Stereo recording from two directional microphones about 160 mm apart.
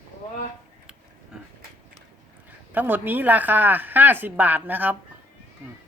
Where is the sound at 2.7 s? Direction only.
10° right (ahead or behind).